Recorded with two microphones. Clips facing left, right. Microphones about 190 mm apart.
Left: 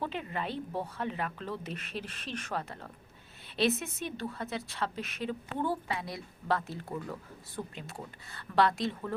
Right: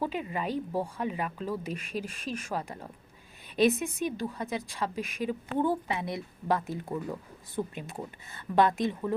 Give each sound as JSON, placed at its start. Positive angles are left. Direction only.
{"t": 0.0, "sound": "a woman's voice", "side_deg": -10}